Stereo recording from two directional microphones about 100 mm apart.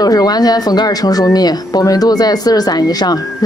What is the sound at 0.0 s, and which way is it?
A woman's voice, 40° left (ahead or behind).